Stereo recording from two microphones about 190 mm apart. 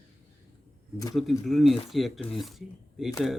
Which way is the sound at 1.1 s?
Centre (ahead or behind).